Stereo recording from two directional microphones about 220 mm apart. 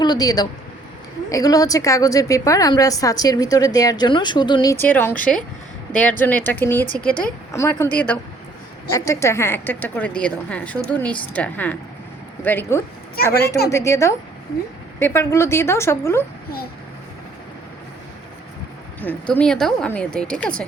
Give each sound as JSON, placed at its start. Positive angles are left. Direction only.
{"t": 0.0, "sound": "a woman's voice", "side_deg": 20}
{"t": 18.9, "sound": "a woman's voice", "side_deg": 5}